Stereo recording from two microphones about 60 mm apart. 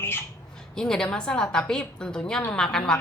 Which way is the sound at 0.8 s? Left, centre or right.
Centre.